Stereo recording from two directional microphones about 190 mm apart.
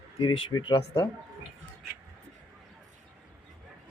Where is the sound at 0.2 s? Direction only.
25° left (ahead or behind).